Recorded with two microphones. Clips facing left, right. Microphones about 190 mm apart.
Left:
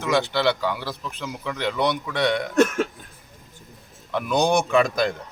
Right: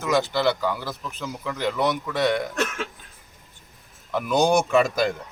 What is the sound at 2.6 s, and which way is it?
Cough, 45° left (ahead or behind).